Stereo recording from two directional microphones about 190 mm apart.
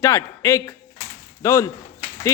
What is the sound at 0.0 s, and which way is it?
Speech, 15° left (ahead or behind).